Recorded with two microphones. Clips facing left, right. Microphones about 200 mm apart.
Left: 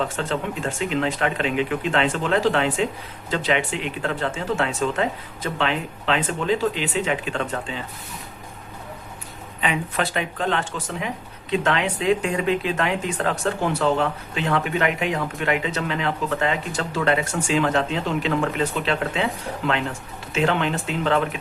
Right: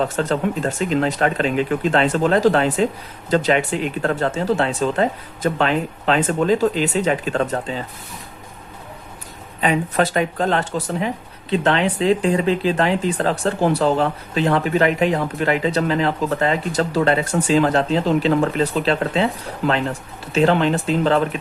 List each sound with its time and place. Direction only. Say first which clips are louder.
0.2 s speech: right 6 dB; 40° right (ahead or behind)
9.6 s speech: right 6 dB; 40° right (ahead or behind)